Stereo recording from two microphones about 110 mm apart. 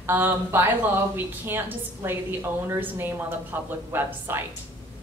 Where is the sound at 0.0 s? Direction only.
20° right (ahead or behind).